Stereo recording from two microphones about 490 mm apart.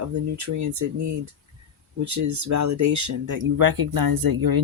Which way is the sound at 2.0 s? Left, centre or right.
Right.